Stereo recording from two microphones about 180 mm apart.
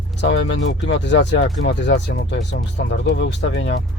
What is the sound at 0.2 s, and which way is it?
Speech, 80° left.